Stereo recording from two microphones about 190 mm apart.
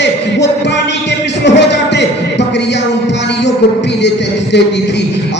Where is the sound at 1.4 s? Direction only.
65° left (ahead or behind).